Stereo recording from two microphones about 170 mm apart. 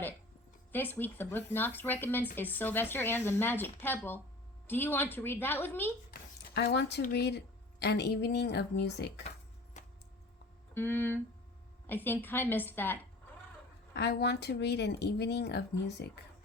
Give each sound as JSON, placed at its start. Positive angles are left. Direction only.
{"t": 0.7, "sound": "speech", "side_deg": 10}
{"t": 6.1, "sound": "a sound", "side_deg": 75}
{"t": 7.1, "sound": "a woman's voice", "side_deg": 80}
{"t": 9.7, "sound": "a sound", "side_deg": 45}
{"t": 10.8, "sound": "speech", "side_deg": 10}
{"t": 13.9, "sound": "speech", "side_deg": 75}